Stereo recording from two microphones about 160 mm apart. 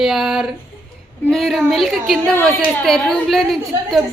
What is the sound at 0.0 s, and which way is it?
A woman's voice, centre (ahead or behind).